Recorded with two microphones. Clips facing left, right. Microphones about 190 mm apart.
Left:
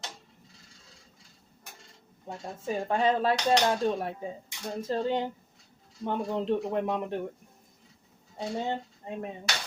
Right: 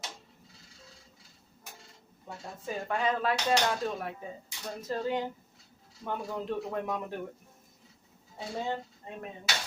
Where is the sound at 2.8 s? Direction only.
30° left (ahead or behind).